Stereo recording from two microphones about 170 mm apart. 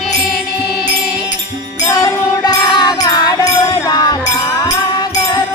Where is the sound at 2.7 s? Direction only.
25° left (ahead or behind).